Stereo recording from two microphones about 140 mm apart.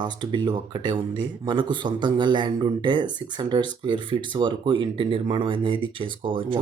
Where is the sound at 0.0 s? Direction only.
30° right (ahead or behind).